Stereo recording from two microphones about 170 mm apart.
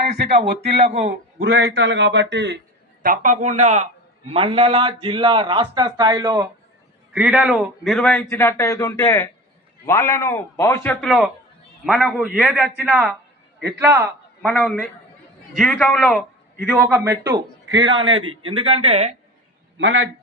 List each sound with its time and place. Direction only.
0.2 s a man's voice: 80° right
3.0 s speech: 55° right (ahead or behind)
4.4 s a man's voice: 30° right (ahead or behind)
7.1 s a man's voice: 5° right (ahead or behind); by 10.9 s 15° left (ahead or behind)
11.0 s a man's voice: centre (ahead or behind)
13.7 s speech: 15° right (ahead or behind)
14.4 s a man's voice: 5° left (ahead or behind)
16.9 s speech: 20° right (ahead or behind)
17.7 s a man's voice: 90° right
17.9 s a man's voice: 30° right (ahead or behind)